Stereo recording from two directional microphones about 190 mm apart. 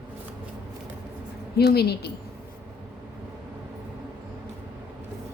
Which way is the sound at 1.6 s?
55° left (ahead or behind).